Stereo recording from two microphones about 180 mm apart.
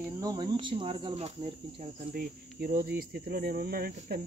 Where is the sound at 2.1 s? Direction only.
55° right (ahead or behind).